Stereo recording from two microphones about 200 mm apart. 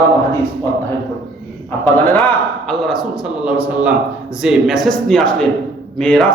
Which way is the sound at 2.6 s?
Centre (ahead or behind).